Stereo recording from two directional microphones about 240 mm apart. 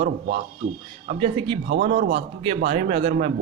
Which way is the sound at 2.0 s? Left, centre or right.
Right.